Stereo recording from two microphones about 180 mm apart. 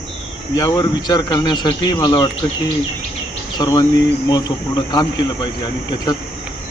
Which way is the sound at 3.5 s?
20° left (ahead or behind).